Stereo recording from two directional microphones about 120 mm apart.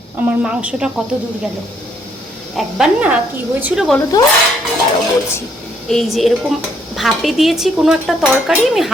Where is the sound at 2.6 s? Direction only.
5° right (ahead or behind).